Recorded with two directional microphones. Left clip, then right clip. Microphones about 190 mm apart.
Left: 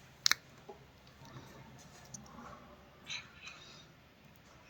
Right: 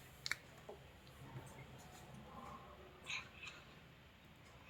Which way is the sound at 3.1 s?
20° right (ahead or behind).